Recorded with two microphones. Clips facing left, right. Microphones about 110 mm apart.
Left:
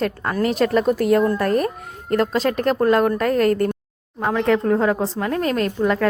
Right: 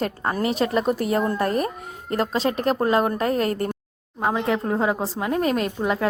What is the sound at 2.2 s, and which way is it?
Speech, centre (ahead or behind).